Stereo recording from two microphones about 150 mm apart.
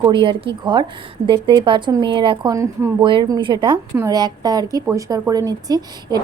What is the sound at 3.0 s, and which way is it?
A woman's voice, 30° right (ahead or behind).